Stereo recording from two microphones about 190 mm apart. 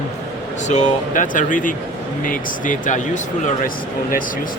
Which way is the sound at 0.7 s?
40° left (ahead or behind).